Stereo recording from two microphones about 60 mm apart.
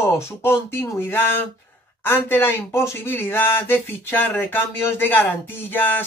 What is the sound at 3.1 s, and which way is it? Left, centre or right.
Speech, left.